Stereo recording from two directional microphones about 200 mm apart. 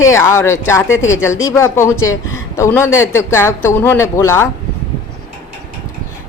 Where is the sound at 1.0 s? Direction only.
75° left (ahead or behind).